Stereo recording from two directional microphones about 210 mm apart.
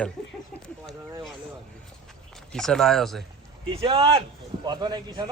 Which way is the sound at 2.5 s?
5° left (ahead or behind).